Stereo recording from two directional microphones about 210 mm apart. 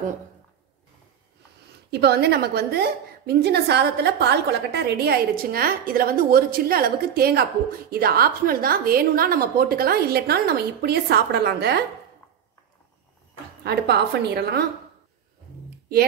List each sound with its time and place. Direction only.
1.9 s a woman's voice: 50° right (ahead or behind)
13.7 s a woman's voice: 50° right (ahead or behind)